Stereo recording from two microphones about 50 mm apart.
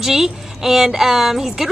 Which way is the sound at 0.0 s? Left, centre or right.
Centre.